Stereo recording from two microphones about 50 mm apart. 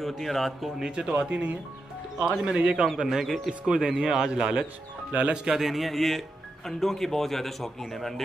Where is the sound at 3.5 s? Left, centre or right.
Centre.